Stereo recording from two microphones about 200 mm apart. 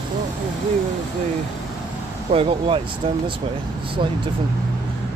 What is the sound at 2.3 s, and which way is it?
Speech, 30° right (ahead or behind).